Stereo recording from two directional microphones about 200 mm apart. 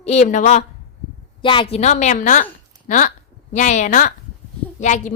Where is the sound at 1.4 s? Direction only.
25° left (ahead or behind).